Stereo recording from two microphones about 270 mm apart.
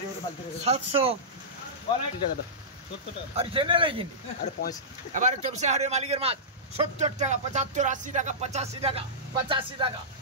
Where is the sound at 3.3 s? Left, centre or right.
Centre.